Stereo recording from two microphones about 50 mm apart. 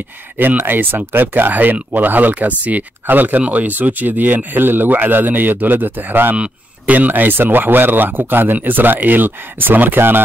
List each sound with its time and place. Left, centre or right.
0.4 s speech: right
6.3 s a man's voice: right
7.0 s speech: right